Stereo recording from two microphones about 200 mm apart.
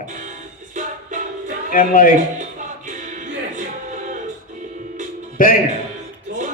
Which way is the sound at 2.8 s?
40° right (ahead or behind).